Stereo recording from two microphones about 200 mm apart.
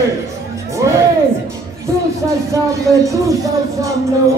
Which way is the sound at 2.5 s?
15° right (ahead or behind).